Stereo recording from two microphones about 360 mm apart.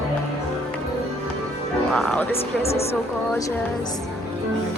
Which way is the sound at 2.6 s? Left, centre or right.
Centre.